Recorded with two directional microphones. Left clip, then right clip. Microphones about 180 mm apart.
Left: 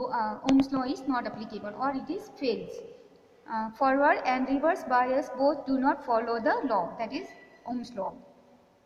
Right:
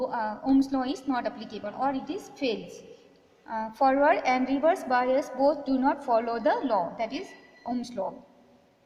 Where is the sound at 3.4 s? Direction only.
40° right (ahead or behind).